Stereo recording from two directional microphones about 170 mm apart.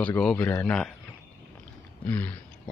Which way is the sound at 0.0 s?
5° left (ahead or behind).